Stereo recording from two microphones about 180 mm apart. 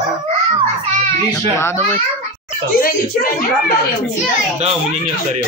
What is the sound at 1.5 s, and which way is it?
Speech, 15° left (ahead or behind).